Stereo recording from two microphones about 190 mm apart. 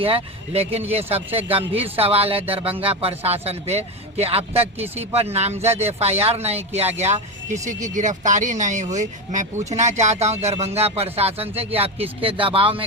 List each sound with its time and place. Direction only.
0.0 s speech: 30° right (ahead or behind)